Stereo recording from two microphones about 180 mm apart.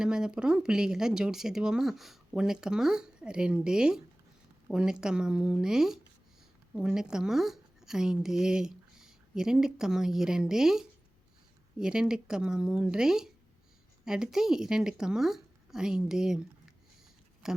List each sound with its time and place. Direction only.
0.0 s a woman's voice: 5° right (ahead or behind)